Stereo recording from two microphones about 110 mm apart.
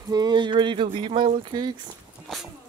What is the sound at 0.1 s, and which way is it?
Speech, 40° right (ahead or behind).